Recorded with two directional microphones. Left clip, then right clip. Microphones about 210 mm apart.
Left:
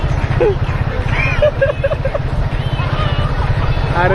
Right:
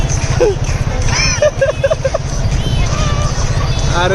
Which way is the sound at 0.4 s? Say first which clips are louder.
Right 2 dB; 60° right (ahead or behind).